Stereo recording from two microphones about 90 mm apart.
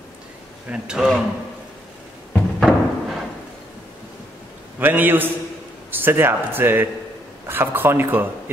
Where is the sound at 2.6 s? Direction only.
Centre (ahead or behind).